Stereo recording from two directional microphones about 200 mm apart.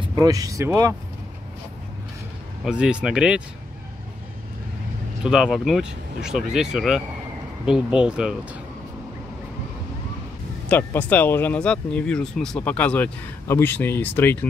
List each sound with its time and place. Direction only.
0.2 s speech: 15° right (ahead or behind)
2.6 s speech: 5° right (ahead or behind)
5.2 s speech: 5° right (ahead or behind)
10.7 s speech: 10° left (ahead or behind)